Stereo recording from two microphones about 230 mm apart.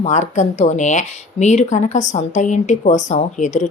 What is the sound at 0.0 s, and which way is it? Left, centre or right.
Speech, left.